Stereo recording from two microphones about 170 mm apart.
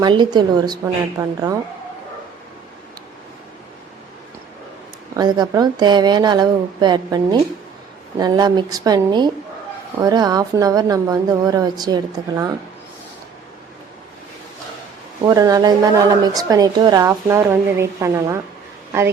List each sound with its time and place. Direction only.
0.0 s a woman's voice: 25° right (ahead or behind)
5.1 s a woman's voice: 25° right (ahead or behind)
15.2 s a woman's voice: 20° right (ahead or behind)